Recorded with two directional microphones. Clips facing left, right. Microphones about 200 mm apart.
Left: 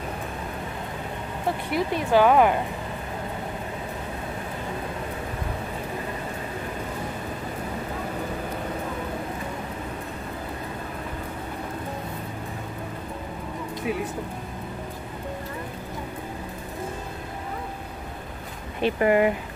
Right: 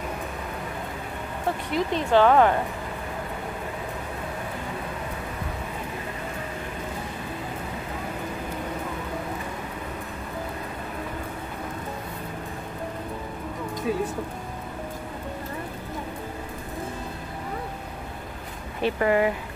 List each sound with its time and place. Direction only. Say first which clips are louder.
1.7 s speech: even; 10° left (ahead or behind)
13.9 s speech: right 1 dB; 15° left (ahead or behind)
18.8 s speech: left 2 dB; 20° left (ahead or behind)